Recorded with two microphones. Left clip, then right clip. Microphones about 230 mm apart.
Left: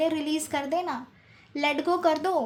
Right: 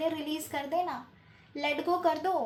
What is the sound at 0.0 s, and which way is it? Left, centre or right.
A woman's voice, left.